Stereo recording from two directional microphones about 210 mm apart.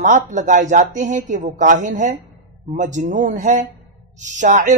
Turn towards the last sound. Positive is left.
turn(degrees=-35)  # may be behind; listen again after turning